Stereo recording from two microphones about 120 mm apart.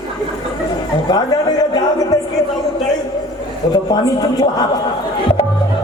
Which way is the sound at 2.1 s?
30° left (ahead or behind).